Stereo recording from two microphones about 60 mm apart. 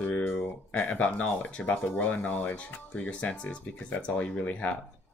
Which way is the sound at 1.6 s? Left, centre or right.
Left.